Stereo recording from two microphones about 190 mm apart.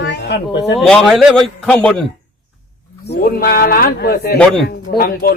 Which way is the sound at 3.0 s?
55° left (ahead or behind).